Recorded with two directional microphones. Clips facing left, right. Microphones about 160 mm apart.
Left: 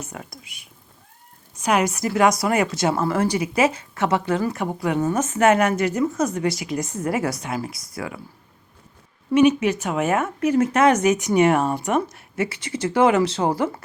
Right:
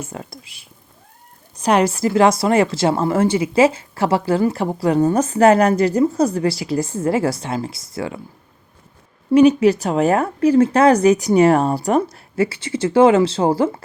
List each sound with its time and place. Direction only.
0.0 s speech: 30° right (ahead or behind)
9.3 s speech: 35° right (ahead or behind)